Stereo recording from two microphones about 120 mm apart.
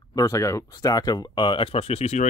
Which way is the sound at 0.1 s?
25° left (ahead or behind).